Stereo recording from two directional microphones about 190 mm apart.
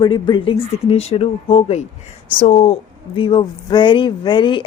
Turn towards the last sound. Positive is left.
turn(degrees=25)  # may be behind; listen again after turning